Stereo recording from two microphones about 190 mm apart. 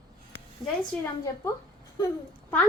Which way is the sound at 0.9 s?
5° left (ahead or behind).